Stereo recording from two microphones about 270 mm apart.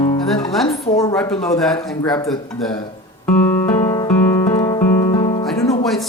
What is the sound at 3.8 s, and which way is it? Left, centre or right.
Guitar, centre.